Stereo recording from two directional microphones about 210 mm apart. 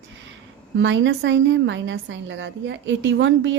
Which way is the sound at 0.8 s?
60° right (ahead or behind).